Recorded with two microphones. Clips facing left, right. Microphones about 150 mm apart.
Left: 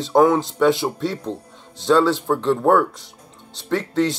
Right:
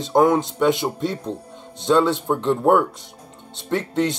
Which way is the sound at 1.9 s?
20° right (ahead or behind).